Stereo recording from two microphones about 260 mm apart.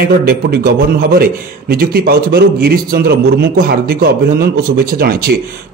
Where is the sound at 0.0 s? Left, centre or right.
Right.